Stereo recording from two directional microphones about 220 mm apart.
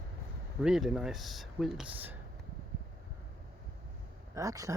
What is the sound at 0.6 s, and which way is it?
Speech, 5° right (ahead or behind).